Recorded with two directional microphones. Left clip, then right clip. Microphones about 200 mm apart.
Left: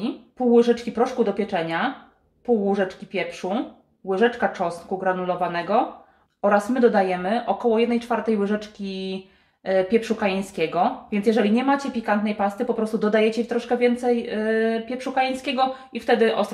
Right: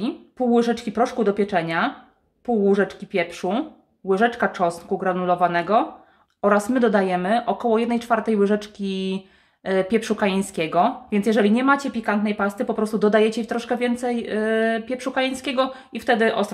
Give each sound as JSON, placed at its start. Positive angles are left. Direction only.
{"t": 0.5, "sound": "speech", "side_deg": -45}